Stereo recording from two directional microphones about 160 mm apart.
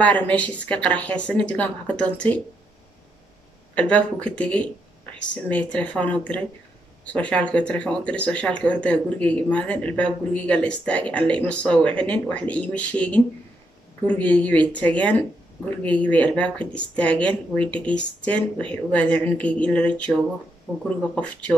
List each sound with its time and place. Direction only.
0.0 s speech: 10° left (ahead or behind)
3.7 s speech: 10° left (ahead or behind)
20.7 s speech: 20° right (ahead or behind)
21.1 s speech: 5° left (ahead or behind)